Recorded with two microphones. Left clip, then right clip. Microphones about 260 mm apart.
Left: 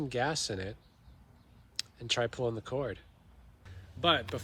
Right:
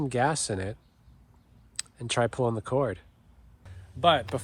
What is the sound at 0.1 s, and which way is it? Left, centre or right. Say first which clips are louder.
Speech: right 6 dB; right.